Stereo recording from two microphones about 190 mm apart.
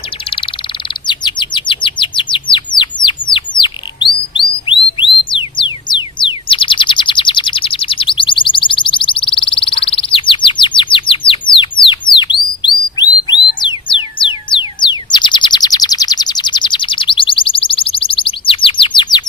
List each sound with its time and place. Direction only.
0.3 s frog: 30° left (ahead or behind)
1.0 s bird: 25° left (ahead or behind)